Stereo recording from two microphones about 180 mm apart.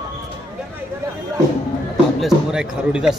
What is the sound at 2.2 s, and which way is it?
Basketball bounce, 5° right (ahead or behind).